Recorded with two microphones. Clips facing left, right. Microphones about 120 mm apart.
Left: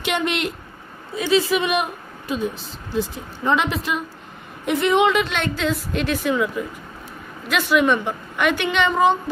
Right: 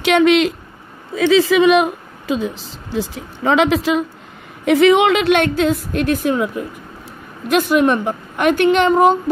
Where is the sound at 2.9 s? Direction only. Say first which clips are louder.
Right 2 dB; 90° right.